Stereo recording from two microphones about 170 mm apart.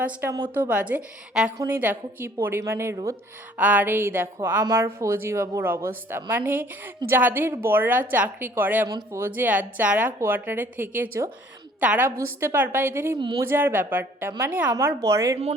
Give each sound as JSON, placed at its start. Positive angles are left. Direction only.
{"t": 0.0, "sound": "speech", "side_deg": -15}
{"t": 13.1, "sound": "speech", "side_deg": -30}
{"t": 13.4, "sound": "speech", "side_deg": -15}